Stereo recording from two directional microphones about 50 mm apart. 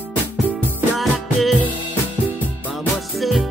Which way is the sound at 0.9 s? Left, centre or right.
Centre.